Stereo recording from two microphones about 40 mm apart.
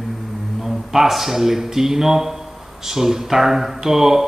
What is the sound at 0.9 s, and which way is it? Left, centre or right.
Speech, centre.